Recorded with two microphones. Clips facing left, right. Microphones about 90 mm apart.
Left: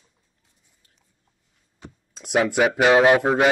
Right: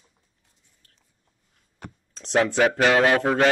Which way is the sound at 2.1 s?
10° left (ahead or behind).